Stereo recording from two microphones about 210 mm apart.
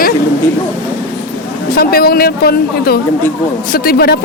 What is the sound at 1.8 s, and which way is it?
Speech, 45° left (ahead or behind).